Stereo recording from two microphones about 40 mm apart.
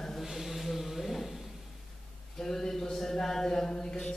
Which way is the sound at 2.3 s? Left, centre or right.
Centre.